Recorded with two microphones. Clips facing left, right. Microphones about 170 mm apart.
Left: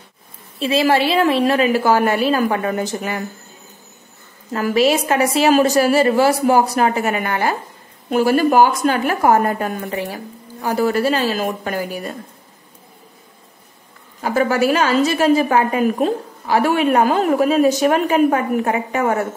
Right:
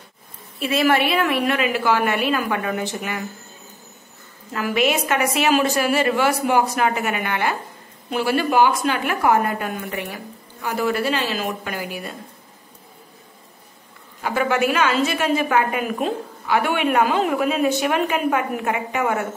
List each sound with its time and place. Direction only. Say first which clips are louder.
0.6 s a woman's voice: left 3 dB; 30° left (ahead or behind)
4.5 s a woman's voice: left 5 dB; 40° left (ahead or behind)
14.2 s a woman's voice: left 4 dB; 40° left (ahead or behind)